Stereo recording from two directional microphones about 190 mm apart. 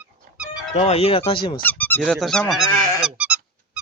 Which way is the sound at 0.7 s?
30° left (ahead or behind).